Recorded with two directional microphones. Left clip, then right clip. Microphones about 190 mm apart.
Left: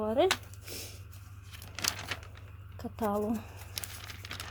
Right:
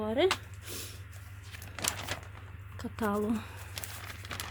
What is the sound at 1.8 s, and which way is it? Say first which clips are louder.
Crumpling: left 1 dB; 5° right (ahead or behind).